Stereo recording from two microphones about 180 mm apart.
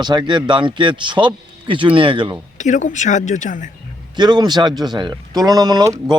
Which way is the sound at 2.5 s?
45° left (ahead or behind).